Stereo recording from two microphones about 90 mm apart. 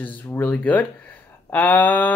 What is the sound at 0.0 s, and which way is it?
Speech, 20° left (ahead or behind).